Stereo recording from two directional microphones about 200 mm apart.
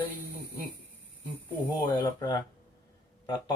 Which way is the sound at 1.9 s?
20° left (ahead or behind).